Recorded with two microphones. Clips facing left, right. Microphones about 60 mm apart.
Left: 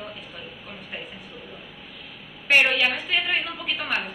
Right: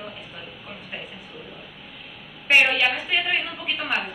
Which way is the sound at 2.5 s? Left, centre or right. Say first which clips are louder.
Right 1 dB; centre.